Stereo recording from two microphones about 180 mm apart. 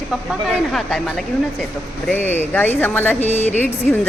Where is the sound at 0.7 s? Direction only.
Centre (ahead or behind).